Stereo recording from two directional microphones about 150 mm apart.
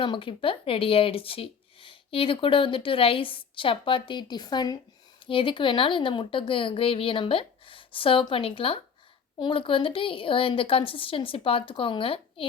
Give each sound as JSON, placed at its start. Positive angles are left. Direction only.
{"t": 0.0, "sound": "speech", "side_deg": 35}